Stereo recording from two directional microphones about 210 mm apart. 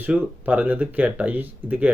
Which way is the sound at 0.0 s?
5° right (ahead or behind).